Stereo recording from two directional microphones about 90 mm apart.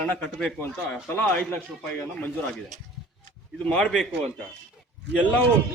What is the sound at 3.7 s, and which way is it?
Speech, 10° left (ahead or behind).